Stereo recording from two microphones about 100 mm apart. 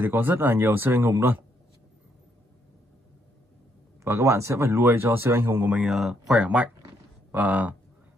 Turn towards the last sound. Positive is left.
turn(degrees=-15)  # may be behind; listen again after turning